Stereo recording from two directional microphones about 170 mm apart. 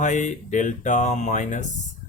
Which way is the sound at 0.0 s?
45° left (ahead or behind).